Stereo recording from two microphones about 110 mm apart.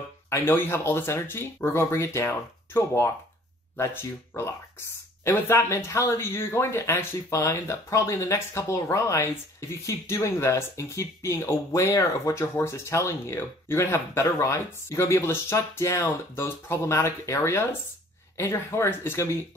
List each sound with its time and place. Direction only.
0.3 s speech: 20° left (ahead or behind)